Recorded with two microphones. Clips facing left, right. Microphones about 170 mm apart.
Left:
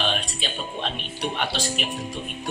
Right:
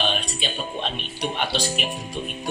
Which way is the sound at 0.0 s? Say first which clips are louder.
Right 1 dB; centre (ahead or behind).